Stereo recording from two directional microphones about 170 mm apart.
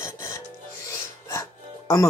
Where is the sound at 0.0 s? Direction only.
15° left (ahead or behind).